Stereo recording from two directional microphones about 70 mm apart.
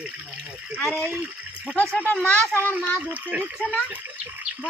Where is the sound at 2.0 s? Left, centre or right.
Left.